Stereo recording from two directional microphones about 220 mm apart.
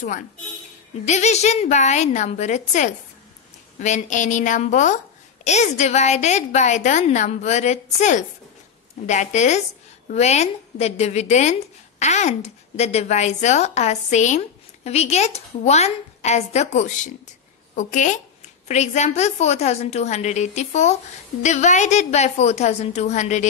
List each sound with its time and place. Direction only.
1.0 s a woman's voice: 30° left (ahead or behind)